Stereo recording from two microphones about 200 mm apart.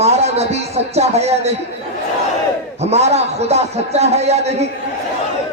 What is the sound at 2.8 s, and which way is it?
Speech, 35° right (ahead or behind).